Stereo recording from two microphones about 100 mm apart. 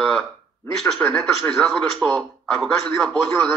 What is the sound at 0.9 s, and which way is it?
Speech, 5° left (ahead or behind).